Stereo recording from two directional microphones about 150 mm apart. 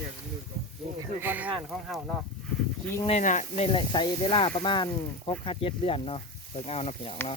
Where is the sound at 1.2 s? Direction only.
10° right (ahead or behind).